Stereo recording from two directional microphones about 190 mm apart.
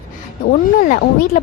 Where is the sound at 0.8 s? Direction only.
45° left (ahead or behind).